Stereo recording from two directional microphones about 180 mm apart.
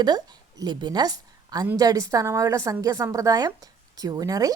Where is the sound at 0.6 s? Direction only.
25° right (ahead or behind).